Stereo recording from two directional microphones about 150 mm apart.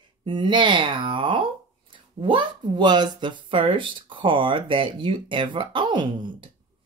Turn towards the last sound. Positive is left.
turn(degrees=-30)  # may be behind; listen again after turning